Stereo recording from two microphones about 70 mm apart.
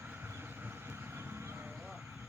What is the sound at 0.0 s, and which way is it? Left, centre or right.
Vehicle, right.